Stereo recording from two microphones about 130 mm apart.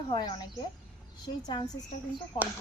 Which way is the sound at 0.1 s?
35° left (ahead or behind).